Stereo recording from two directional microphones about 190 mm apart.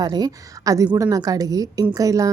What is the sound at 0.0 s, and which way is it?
A woman's voice, 20° right (ahead or behind).